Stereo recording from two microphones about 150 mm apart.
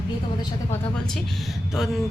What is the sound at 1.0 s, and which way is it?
Speech, centre (ahead or behind).